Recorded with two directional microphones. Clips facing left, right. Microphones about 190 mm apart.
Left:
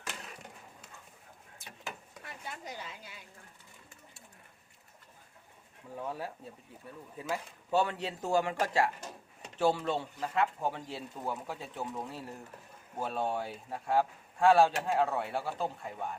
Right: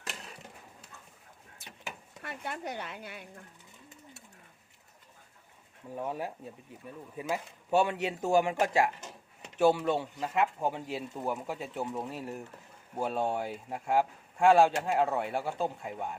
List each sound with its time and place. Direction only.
2.2 s speech: 65° right (ahead or behind)
6.0 s speech: 15° right (ahead or behind)